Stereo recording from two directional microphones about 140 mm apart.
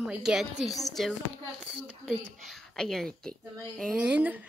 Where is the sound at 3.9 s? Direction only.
10° right (ahead or behind).